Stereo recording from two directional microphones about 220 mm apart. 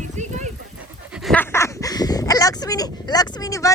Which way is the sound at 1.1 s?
Centre (ahead or behind).